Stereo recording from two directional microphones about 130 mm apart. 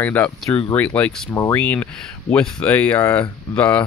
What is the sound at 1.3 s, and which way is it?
Speech, 20° left (ahead or behind).